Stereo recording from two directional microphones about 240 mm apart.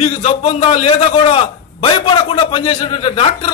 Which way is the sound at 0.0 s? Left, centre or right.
Left.